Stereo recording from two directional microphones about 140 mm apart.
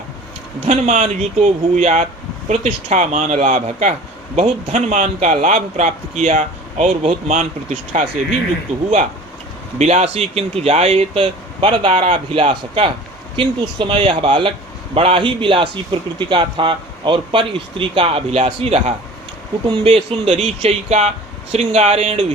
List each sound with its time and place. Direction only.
0.6 s a man's voice: 55° right (ahead or behind)
9.7 s a man's voice: 50° right (ahead or behind)